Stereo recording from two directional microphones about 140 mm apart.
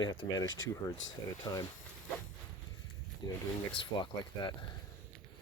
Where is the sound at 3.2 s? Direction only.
30° left (ahead or behind).